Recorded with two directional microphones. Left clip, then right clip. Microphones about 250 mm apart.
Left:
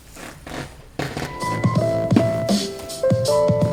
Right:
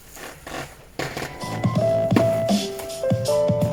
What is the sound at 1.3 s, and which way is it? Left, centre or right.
Music, left.